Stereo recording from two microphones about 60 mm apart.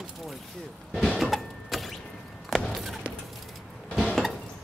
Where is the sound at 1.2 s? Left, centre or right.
Centre.